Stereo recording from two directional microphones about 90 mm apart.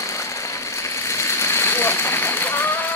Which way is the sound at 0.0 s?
35° left (ahead or behind).